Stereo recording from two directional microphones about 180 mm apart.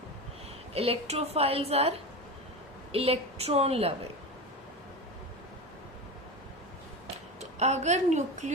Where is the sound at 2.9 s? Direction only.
30° right (ahead or behind).